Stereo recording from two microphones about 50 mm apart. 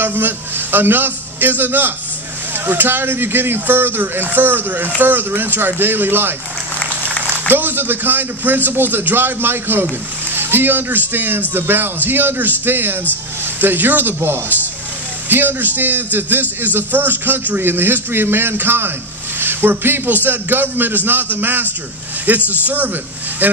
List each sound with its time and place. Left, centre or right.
0.0 s a man's voice: right
7.4 s a man's voice: right
15.2 s a man's voice: right